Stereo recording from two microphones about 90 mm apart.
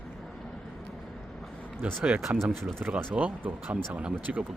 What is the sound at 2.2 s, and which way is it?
Speech, centre (ahead or behind).